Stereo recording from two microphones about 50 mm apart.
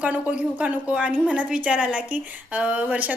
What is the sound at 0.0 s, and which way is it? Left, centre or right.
A woman's voice, right.